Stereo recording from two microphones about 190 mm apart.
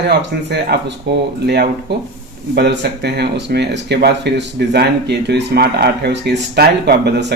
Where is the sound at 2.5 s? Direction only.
60° right (ahead or behind).